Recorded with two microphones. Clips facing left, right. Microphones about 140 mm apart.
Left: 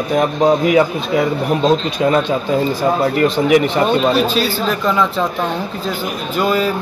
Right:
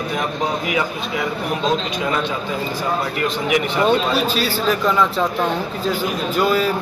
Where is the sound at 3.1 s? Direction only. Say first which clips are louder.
Left 8 dB; 40° left (ahead or behind).